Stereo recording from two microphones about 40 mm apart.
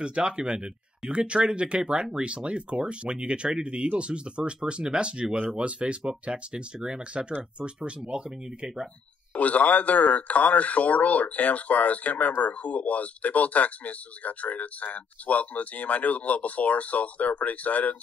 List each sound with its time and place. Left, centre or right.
0.0 s speech: right
9.3 s speech: left